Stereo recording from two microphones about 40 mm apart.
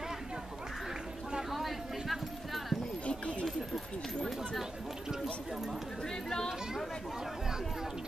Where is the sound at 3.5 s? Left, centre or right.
Centre.